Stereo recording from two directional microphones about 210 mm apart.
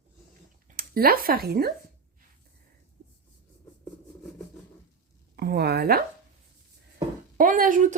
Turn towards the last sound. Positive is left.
turn(degrees=-40)  # may be behind; listen again after turning